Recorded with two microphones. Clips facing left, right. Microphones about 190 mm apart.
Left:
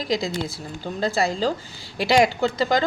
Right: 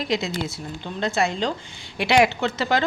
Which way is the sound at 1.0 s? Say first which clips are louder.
Even; 35° left (ahead or behind).